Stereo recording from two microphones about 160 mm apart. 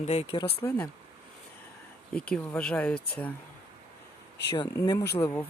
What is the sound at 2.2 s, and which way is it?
Speech, 5° left (ahead or behind).